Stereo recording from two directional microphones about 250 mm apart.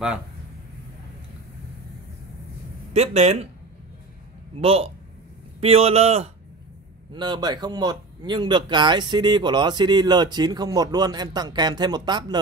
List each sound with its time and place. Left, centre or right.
2.9 s a man's voice: right
4.6 s a man's voice: right